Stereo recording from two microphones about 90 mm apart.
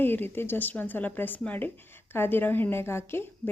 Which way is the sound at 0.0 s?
20° left (ahead or behind).